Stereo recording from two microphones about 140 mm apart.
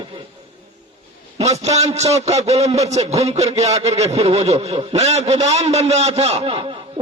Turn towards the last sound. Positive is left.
turn(degrees=-45)  # may be behind; listen again after turning